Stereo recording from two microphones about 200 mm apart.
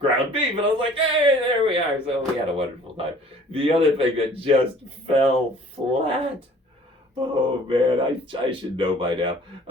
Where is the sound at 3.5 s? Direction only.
25° right (ahead or behind).